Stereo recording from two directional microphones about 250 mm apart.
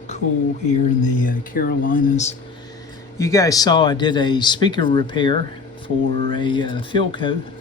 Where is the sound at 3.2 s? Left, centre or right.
Centre.